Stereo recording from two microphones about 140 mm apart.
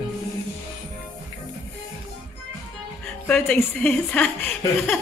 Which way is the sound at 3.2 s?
10° left (ahead or behind).